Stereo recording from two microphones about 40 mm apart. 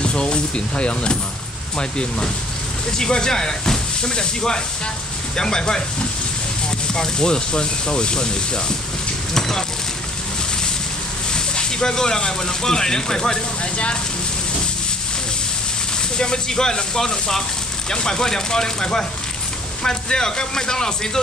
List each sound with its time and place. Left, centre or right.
0.0 s speech: left
6.9 s speech: centre
11.3 s speech: centre
16.2 s speech: centre